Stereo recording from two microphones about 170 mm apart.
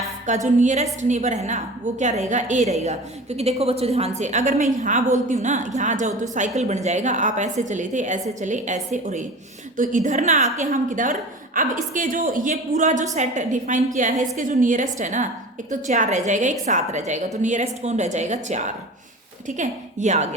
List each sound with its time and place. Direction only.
0.3 s a woman's voice: 45° right (ahead or behind)